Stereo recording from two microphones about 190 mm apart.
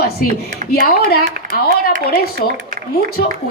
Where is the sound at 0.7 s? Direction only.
55° left (ahead or behind).